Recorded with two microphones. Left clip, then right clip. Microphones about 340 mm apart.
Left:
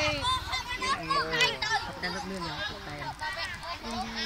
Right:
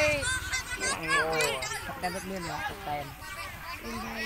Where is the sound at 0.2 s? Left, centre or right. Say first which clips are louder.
Left 2 dB; centre.